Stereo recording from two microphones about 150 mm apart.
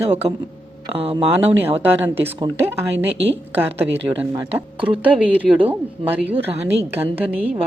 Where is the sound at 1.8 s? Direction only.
15° right (ahead or behind).